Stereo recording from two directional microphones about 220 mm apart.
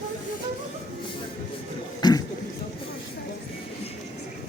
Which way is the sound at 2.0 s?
20° left (ahead or behind).